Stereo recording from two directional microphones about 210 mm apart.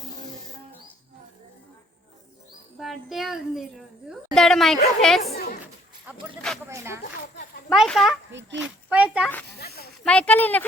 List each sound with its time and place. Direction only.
2.7 s a child's voice: centre (ahead or behind)
6.7 s speech: 15° right (ahead or behind)
7.7 s a child's voice: centre (ahead or behind)
8.3 s a child's voice: 60° right (ahead or behind)
8.6 s a child's voice: 5° right (ahead or behind)
9.6 s speech: 50° left (ahead or behind)
10.0 s speech: 5° left (ahead or behind)